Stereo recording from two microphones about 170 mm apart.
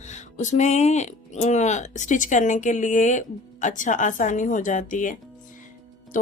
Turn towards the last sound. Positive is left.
turn(degrees=50)  # may be behind; listen again after turning